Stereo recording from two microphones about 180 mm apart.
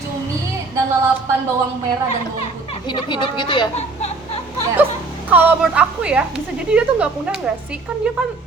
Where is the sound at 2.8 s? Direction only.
25° left (ahead or behind).